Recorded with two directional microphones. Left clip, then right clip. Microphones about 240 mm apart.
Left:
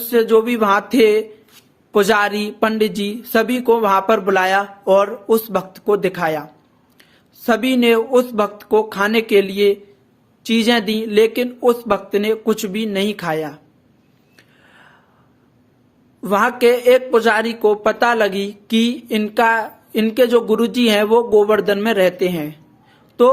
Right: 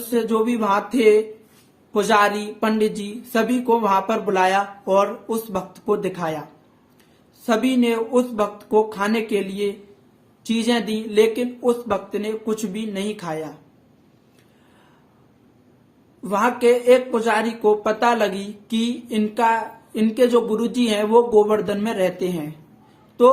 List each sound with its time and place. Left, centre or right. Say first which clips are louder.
0.0 s speech: left 7 dB; left
7.4 s speech: left 5 dB; left
16.2 s speech: left 4 dB; left